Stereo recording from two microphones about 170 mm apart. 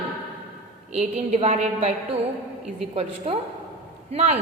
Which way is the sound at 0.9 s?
40° right (ahead or behind).